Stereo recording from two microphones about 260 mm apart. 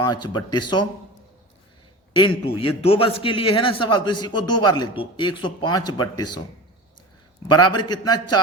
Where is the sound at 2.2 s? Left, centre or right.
Centre.